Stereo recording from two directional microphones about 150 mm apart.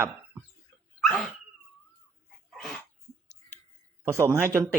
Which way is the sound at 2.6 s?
Centre (ahead or behind).